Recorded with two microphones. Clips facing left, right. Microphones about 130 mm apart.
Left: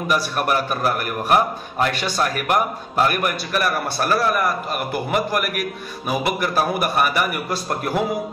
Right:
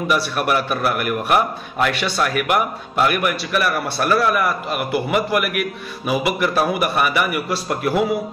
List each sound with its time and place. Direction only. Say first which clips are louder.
0.1 s a man's voice: right 1 dB; 40° left (ahead or behind)